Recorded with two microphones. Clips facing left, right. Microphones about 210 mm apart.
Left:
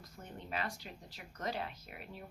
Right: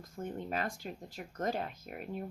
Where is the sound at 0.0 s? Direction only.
50° right (ahead or behind).